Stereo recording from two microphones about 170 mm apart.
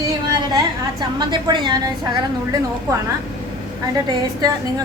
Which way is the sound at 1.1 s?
25° right (ahead or behind).